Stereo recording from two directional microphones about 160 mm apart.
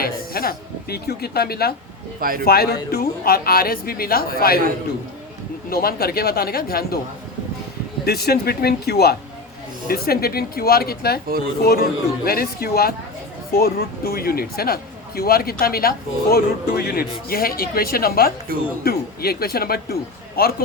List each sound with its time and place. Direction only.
0.0 s a man's voice: 70° left (ahead or behind)
5.7 s a man's voice: 70° left (ahead or behind)
8.0 s a man's voice: 80° left
18.5 s speech: 65° right (ahead or behind)
18.9 s a man's voice: 75° left (ahead or behind)